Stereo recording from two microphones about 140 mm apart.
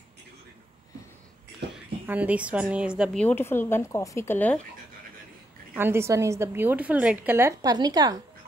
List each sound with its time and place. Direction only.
2.0 s a woman's voice: 10° right (ahead or behind)
3.2 s speech: 10° left (ahead or behind)
5.8 s a woman's voice: 15° right (ahead or behind)
7.6 s a woman's voice: 30° right (ahead or behind)